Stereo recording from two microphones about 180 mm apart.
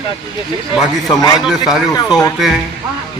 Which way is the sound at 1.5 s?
Centre (ahead or behind).